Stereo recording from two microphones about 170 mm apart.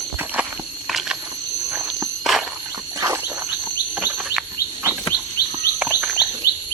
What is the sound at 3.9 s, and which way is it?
Bird, 5° right (ahead or behind).